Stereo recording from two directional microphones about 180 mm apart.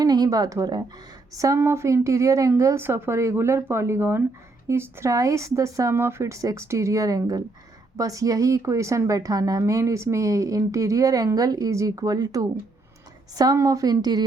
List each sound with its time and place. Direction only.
0.0 s a woman's voice: 20° right (ahead or behind)